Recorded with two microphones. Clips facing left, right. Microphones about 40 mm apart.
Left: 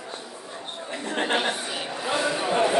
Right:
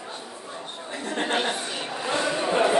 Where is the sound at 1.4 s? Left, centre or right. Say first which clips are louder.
Even; centre.